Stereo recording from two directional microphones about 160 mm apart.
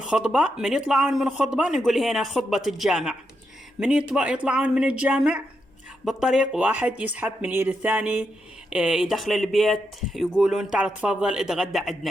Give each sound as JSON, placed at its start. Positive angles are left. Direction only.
{"t": 0.0, "sound": "speech", "side_deg": -5}